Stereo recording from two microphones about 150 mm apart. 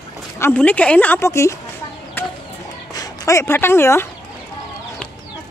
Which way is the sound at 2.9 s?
25° left (ahead or behind).